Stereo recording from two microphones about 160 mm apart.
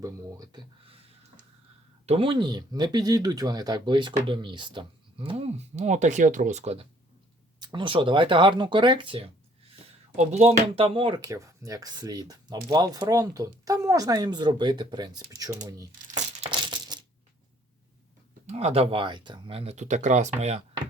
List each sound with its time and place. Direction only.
0.0 s speech: 20° right (ahead or behind)
2.0 s speech: 35° right (ahead or behind)
7.6 s speech: 30° right (ahead or behind)
10.2 s speech: 45° right (ahead or behind)
11.2 s speech: 20° right (ahead or behind)
16.5 s coin: 30° right (ahead or behind)
18.4 s speech: 40° right (ahead or behind)